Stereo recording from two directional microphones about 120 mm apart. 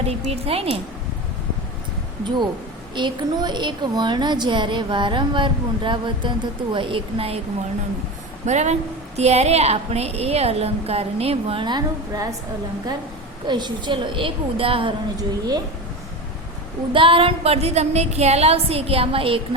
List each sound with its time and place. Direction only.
0.0 s a woman's voice: 55° right (ahead or behind)
2.9 s a woman's voice: 40° right (ahead or behind)
8.4 s a woman's voice: 75° right (ahead or behind); by 11.6 s 55° right (ahead or behind)
11.6 s a woman's voice: 35° right (ahead or behind)
13.5 s a woman's voice: 40° right (ahead or behind)
15.1 s a woman's voice: 30° right (ahead or behind)
16.9 s a woman's voice: 45° right (ahead or behind)